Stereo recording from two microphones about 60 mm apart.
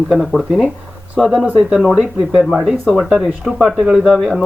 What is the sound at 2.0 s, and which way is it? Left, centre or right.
Speech, centre.